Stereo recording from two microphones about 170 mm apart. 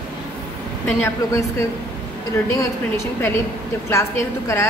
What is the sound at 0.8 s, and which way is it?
Speech, 15° left (ahead or behind).